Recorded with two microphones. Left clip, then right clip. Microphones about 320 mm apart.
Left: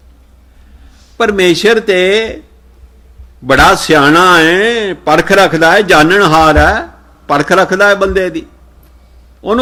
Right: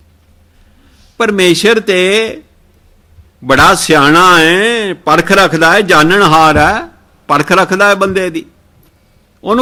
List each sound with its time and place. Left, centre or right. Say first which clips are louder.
1.1 s a man's voice: even; right
3.4 s a man's voice: even; right